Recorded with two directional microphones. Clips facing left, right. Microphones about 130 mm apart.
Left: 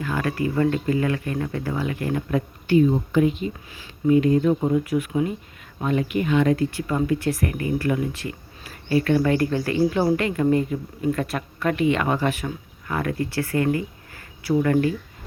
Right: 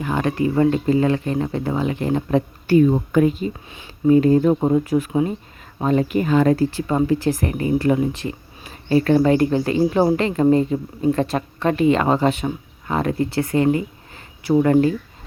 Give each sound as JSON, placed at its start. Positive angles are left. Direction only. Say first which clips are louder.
{"t": 0.0, "sound": "speech", "louder": "right 4 dB", "side_deg": -25}
{"t": 2.6, "sound": "speech", "louder": "right 2 dB", "side_deg": -55}